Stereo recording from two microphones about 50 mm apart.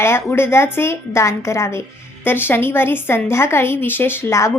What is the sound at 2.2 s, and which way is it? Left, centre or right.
Speech, left.